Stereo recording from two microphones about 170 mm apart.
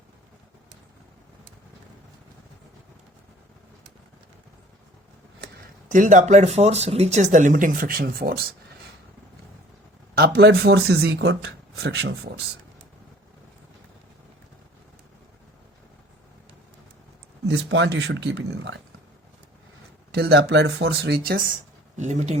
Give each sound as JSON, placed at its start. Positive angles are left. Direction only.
{"t": 5.9, "sound": "speech", "side_deg": -50}
{"t": 10.2, "sound": "speech", "side_deg": -75}
{"t": 17.5, "sound": "speech", "side_deg": -90}
{"t": 20.1, "sound": "speech", "side_deg": -75}
{"t": 21.9, "sound": "speech", "side_deg": -45}